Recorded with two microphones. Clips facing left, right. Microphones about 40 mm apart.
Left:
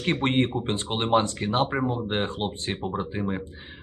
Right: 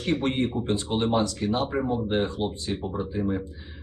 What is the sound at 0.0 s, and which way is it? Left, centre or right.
Speech, left.